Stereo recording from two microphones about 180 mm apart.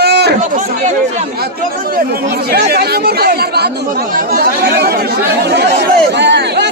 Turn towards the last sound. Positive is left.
turn(degrees=-70)  # may be behind; listen again after turning